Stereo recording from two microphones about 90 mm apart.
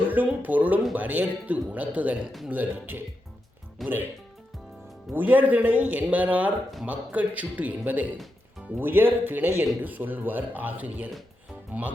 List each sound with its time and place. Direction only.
0.0 s a sound: 20° right (ahead or behind)
0.9 s a man's voice: 20° right (ahead or behind)
3.8 s speech: centre (ahead or behind)
5.1 s a man's voice: 20° right (ahead or behind)